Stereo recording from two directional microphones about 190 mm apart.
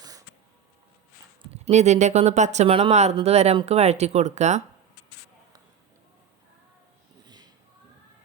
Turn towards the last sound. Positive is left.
turn(degrees=-20)  # may be behind; listen again after turning